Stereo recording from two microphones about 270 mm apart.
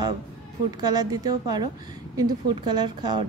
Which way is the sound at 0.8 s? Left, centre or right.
Centre.